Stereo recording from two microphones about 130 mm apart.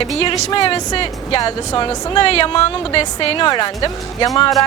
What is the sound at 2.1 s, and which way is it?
Speech, 45° left (ahead or behind).